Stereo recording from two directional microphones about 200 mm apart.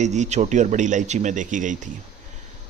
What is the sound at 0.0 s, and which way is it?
Speech, 35° right (ahead or behind).